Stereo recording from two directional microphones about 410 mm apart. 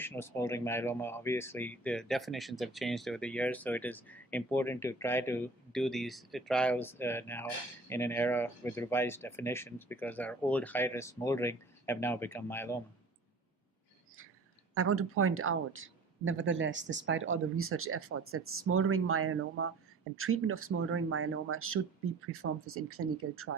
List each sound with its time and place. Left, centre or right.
0.0 s speech: centre
14.8 s speech: right